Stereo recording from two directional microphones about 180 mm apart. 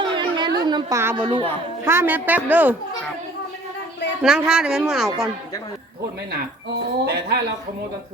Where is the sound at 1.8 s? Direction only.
15° right (ahead or behind).